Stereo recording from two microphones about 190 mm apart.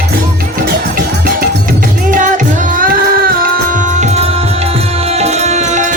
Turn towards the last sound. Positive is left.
turn(degrees=-40)  # may be behind; listen again after turning